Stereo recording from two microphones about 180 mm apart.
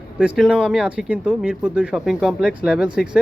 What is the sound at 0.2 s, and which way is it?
Speech, 5° right (ahead or behind).